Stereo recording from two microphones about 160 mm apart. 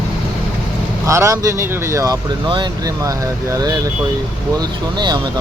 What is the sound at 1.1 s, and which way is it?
Speech, 20° right (ahead or behind).